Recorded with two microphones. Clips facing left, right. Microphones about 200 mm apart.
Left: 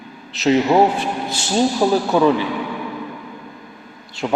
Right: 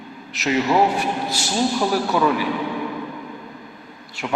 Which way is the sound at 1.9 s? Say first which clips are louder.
Left 4 dB; 25° left (ahead or behind).